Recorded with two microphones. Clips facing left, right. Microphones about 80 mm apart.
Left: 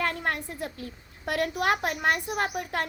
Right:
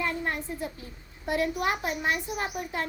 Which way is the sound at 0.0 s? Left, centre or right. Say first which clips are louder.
Left 1 dB; left.